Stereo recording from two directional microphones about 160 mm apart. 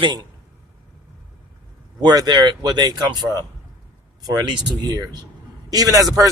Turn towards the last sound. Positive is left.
turn(degrees=-20)  # may be behind; listen again after turning